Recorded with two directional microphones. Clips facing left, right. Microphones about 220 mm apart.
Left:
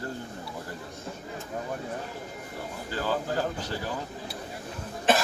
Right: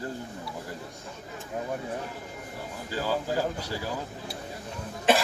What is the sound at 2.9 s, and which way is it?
Speech, 10° right (ahead or behind).